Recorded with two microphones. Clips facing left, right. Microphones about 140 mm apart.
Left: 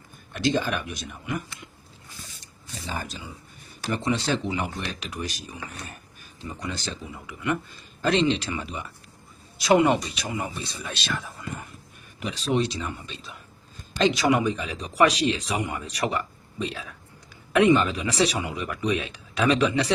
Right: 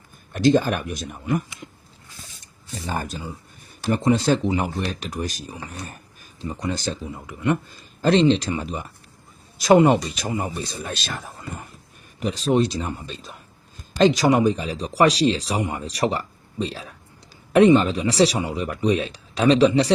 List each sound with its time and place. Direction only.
0.3 s speech: 45° right (ahead or behind)
2.7 s speech: 50° right (ahead or behind); by 19.9 s 35° right (ahead or behind)